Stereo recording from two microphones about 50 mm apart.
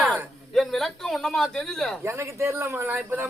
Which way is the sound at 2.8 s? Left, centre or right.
Right.